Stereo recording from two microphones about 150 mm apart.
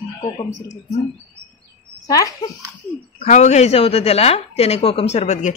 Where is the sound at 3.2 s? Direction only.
50° left (ahead or behind).